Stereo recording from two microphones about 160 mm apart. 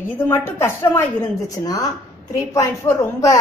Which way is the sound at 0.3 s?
15° left (ahead or behind).